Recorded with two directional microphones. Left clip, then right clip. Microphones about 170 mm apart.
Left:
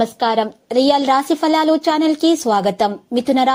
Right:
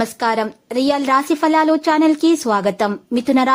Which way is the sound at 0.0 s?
5° right (ahead or behind).